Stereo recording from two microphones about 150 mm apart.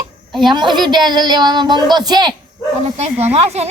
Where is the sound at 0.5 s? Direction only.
30° right (ahead or behind).